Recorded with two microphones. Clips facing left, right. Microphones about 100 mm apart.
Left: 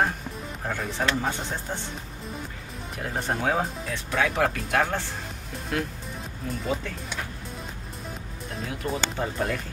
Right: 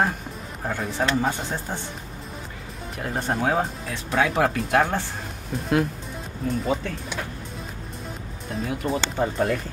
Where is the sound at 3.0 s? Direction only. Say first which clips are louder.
Right 3 dB; 5° right (ahead or behind).